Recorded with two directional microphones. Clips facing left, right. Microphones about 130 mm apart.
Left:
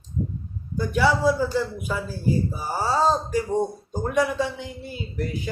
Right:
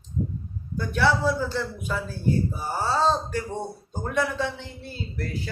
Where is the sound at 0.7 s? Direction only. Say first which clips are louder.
Left 2 dB; 10° left (ahead or behind).